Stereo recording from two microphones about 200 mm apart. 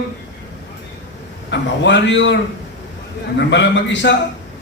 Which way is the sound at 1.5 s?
65° left (ahead or behind).